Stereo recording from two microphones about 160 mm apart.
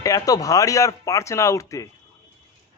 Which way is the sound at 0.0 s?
20° left (ahead or behind).